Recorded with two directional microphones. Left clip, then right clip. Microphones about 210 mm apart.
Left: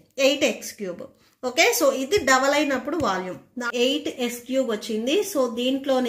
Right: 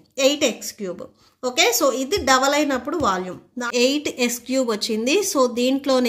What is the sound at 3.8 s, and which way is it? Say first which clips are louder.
A woman's voice: right 4 dB; 55° right (ahead or behind).